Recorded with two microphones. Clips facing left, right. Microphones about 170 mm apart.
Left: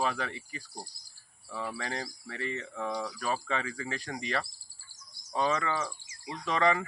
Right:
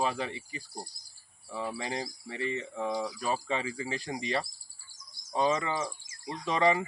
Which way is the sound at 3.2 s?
30° right (ahead or behind).